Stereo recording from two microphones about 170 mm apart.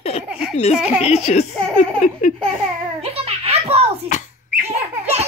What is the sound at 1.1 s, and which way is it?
Speech, 40° left (ahead or behind).